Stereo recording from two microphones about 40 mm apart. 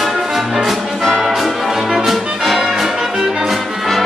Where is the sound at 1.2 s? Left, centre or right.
Centre.